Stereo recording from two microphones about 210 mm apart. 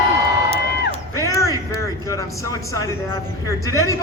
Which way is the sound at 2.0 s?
15° left (ahead or behind).